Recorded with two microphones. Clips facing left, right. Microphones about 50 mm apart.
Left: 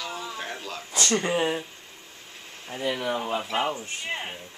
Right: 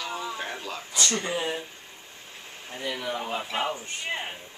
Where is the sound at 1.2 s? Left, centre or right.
Left.